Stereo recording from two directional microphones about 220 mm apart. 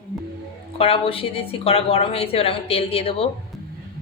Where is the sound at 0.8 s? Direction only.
25° left (ahead or behind).